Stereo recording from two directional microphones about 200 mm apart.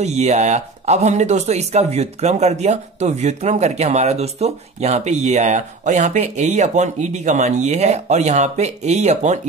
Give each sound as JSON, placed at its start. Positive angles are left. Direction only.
{"t": 0.0, "sound": "speech", "side_deg": -35}